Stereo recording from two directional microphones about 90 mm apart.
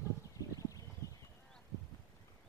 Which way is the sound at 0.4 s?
40° left (ahead or behind).